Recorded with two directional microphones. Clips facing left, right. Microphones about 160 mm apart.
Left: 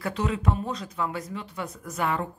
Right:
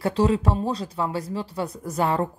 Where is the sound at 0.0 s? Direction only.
30° right (ahead or behind).